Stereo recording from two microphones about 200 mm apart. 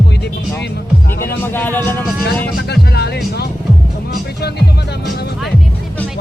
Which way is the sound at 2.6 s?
55° left (ahead or behind).